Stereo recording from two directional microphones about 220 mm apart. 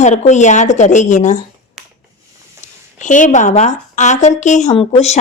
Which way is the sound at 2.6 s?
35° left (ahead or behind).